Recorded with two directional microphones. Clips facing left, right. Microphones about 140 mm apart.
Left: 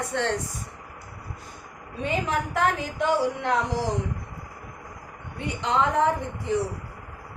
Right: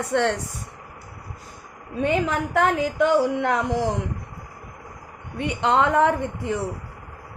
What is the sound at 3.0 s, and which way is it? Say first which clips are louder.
Speech: right 4 dB; 55° right (ahead or behind).